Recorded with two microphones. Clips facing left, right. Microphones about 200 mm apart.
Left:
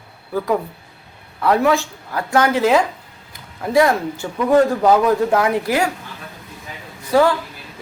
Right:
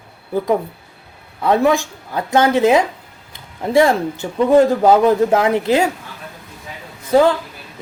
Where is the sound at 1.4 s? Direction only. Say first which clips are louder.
Right 1 dB; 20° right (ahead or behind).